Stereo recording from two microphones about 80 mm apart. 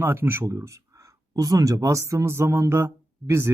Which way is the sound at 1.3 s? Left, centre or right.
Right.